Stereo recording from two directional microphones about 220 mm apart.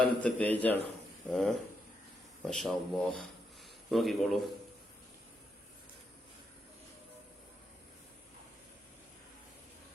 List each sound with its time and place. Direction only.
0.0 s a man's voice: 5° left (ahead or behind)